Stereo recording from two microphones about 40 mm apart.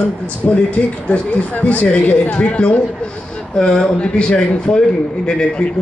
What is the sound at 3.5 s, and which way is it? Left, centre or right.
Speech, left.